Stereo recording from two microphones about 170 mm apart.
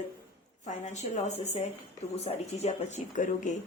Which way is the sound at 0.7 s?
45° left (ahead or behind).